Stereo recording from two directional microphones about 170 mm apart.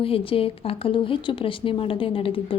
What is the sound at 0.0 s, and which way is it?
Speech, 35° left (ahead or behind).